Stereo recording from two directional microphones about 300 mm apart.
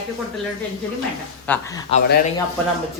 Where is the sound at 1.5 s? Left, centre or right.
Centre.